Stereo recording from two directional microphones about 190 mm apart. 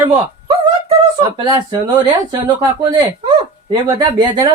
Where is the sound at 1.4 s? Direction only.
20° right (ahead or behind).